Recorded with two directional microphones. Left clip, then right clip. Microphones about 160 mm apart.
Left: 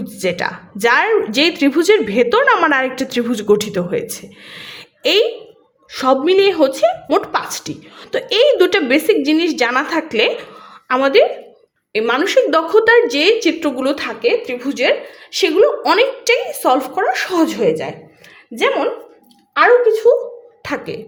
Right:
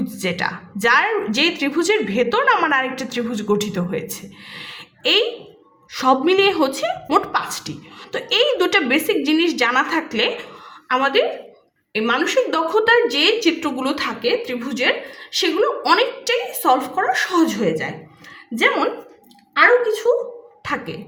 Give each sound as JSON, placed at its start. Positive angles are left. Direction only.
{"t": 0.0, "sound": "a woman's voice", "side_deg": 25}